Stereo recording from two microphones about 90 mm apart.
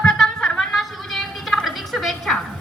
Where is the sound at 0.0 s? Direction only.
5° left (ahead or behind).